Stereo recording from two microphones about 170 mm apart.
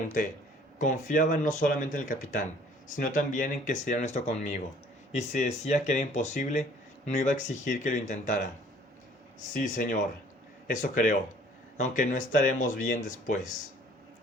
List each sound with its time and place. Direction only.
0.0 s speech: 55° left (ahead or behind)
9.5 s speech: 50° left (ahead or behind)